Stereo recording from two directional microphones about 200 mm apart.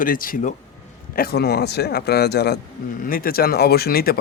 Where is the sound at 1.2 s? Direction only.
50° left (ahead or behind).